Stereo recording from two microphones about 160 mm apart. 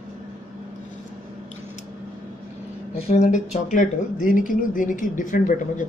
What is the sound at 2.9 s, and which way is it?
Speech, 45° left (ahead or behind).